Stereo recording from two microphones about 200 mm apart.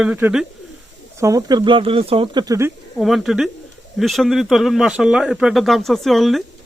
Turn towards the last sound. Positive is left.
turn(degrees=0)  # may be behind; listen again after turning